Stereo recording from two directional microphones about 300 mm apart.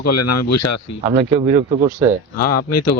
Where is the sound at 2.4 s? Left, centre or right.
Left.